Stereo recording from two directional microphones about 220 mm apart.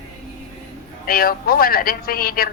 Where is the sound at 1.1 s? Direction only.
40° left (ahead or behind).